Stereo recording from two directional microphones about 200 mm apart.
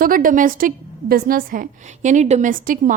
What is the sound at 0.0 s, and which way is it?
A woman's voice, 45° right (ahead or behind).